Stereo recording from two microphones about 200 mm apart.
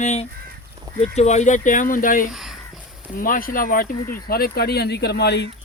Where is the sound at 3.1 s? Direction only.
45° left (ahead or behind).